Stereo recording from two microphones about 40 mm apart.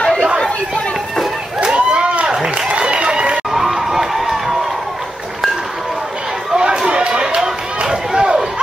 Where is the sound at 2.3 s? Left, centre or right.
Centre.